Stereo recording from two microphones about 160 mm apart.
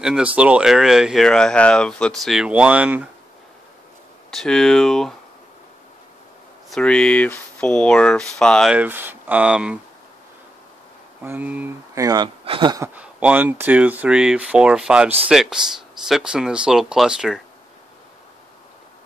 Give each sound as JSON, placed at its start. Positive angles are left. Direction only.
{"t": 0.0, "sound": "speech", "side_deg": -5}
{"t": 4.3, "sound": "speech", "side_deg": 5}
{"t": 6.7, "sound": "speech", "side_deg": 5}
{"t": 8.7, "sound": "speech", "side_deg": -10}
{"t": 11.2, "sound": "speech", "side_deg": -10}
{"t": 12.8, "sound": "speech", "side_deg": -10}